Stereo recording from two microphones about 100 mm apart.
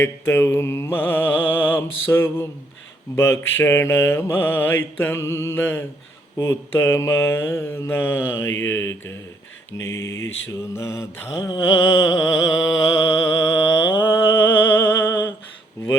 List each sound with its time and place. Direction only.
0.0 s mantra: 25° left (ahead or behind)
11.3 s mantra: 5° right (ahead or behind)
11.6 s mantra: 30° left (ahead or behind)